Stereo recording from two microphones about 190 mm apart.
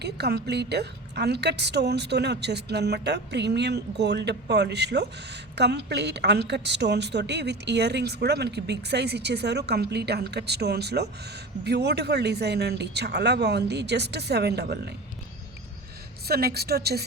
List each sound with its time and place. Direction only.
0.0 s a woman's voice: 60° right (ahead or behind)
16.2 s a woman's voice: 55° right (ahead or behind)